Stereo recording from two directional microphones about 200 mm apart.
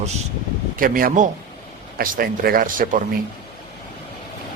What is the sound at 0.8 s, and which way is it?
Speech, 45° right (ahead or behind).